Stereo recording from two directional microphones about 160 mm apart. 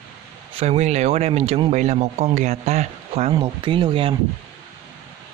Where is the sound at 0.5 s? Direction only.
40° right (ahead or behind).